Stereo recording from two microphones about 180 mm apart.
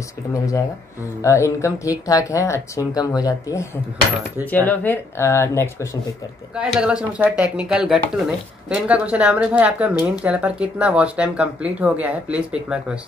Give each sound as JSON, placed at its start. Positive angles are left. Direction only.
{"t": 0.3, "sound": "speech", "side_deg": 20}
{"t": 6.5, "sound": "speech", "side_deg": -5}